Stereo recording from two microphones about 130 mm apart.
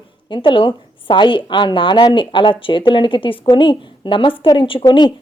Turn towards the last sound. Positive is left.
turn(degrees=40)  # may be behind; listen again after turning